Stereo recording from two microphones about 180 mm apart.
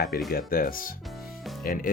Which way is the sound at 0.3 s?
55° left (ahead or behind).